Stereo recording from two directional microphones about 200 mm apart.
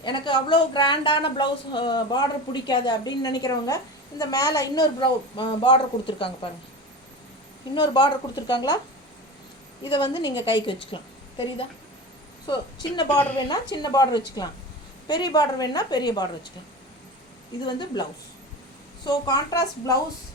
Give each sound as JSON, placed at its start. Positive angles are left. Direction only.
{"t": 0.0, "sound": "a woman's voice", "side_deg": 25}
{"t": 7.7, "sound": "a woman's voice", "side_deg": 20}
{"t": 9.9, "sound": "a woman's voice", "side_deg": 20}
{"t": 13.1, "sound": "speech", "side_deg": 10}
{"t": 13.5, "sound": "a woman's voice", "side_deg": 20}
{"t": 17.6, "sound": "a woman's voice", "side_deg": 20}
{"t": 19.0, "sound": "a woman's voice", "side_deg": 20}